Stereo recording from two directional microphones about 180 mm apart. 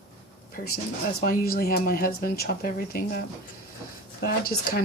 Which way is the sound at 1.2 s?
55° left (ahead or behind).